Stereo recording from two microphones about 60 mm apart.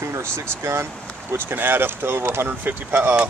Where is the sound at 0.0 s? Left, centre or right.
Right.